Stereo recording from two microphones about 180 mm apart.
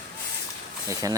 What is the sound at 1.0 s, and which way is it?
Speech, 20° right (ahead or behind).